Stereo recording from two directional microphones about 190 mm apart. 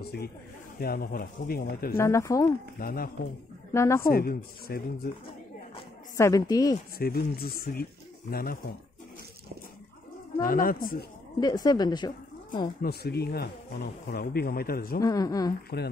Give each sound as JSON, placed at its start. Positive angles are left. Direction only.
{"t": 0.0, "sound": "speech", "side_deg": 55}
{"t": 2.0, "sound": "speech", "side_deg": 15}
{"t": 2.8, "sound": "speech", "side_deg": 50}
{"t": 3.7, "sound": "speech", "side_deg": 15}
{"t": 4.1, "sound": "speech", "side_deg": 50}
{"t": 6.1, "sound": "a woman's voice", "side_deg": 15}
{"t": 7.0, "sound": "speech", "side_deg": 55}
{"t": 10.4, "sound": "speech", "side_deg": 45}
{"t": 11.3, "sound": "a woman's voice", "side_deg": 20}
{"t": 12.8, "sound": "speech", "side_deg": 55}
{"t": 15.0, "sound": "speech", "side_deg": 20}
{"t": 15.7, "sound": "speech", "side_deg": 60}